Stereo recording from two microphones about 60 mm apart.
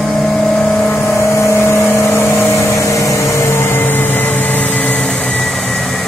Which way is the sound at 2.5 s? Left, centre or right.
Left.